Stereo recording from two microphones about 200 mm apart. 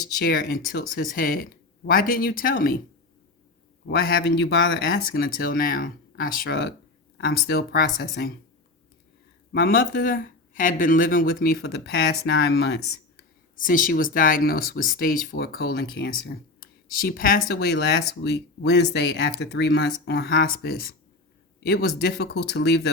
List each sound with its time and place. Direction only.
0.2 s speech: 50° left (ahead or behind)
3.8 s speech: 55° left (ahead or behind)
9.5 s speech: 50° left (ahead or behind)
13.6 s speech: 40° left (ahead or behind)